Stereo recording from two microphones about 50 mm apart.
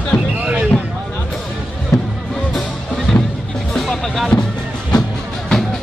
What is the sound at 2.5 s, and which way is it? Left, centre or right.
Music, centre.